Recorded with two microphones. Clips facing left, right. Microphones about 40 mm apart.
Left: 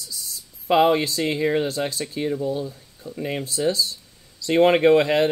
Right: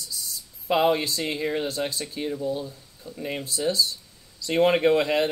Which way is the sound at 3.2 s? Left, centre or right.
Left.